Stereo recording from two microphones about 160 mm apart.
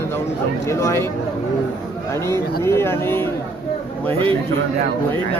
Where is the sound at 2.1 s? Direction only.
15° left (ahead or behind).